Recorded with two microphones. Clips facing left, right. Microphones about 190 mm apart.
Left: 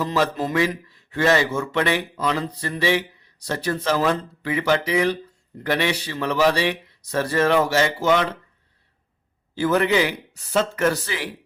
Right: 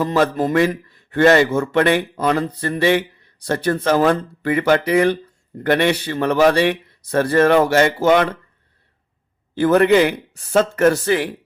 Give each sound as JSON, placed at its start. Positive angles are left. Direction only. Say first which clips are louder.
{"t": 0.0, "sound": "a man's voice", "louder": "right 5 dB", "side_deg": -55}
{"t": 9.6, "sound": "a man's voice", "louder": "right 6 dB", "side_deg": -55}